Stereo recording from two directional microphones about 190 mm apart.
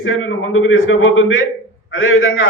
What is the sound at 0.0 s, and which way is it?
A man's voice, 90° left.